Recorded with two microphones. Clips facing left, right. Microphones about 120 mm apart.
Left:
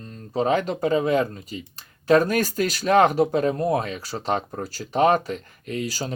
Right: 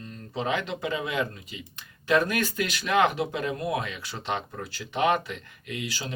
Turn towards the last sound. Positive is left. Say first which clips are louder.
# left 6 dB
turn(degrees=40)  # may be behind; listen again after turning